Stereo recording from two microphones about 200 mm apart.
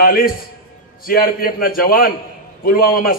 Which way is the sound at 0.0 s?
45° left (ahead or behind).